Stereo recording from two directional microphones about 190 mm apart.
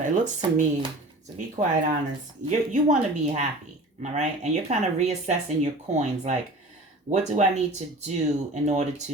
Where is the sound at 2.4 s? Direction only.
40° right (ahead or behind).